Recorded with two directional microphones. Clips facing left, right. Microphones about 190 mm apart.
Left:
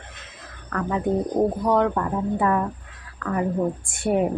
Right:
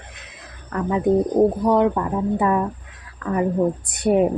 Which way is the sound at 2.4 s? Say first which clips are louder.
Right 2 dB; 15° right (ahead or behind).